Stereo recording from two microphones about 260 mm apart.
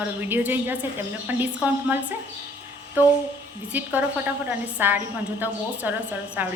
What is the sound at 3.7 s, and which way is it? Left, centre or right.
Speech, centre.